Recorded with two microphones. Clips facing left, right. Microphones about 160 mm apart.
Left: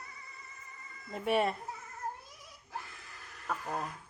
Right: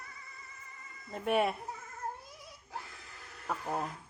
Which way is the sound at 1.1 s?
Centre (ahead or behind).